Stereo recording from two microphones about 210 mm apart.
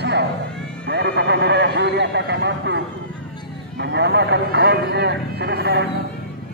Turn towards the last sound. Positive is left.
turn(degrees=-50)  # may be behind; listen again after turning